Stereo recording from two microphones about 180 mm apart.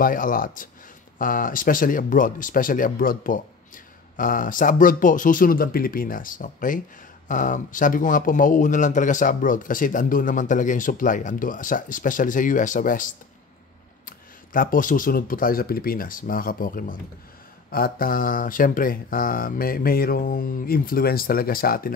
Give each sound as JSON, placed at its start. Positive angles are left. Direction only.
{"t": 0.0, "sound": "speech", "side_deg": 50}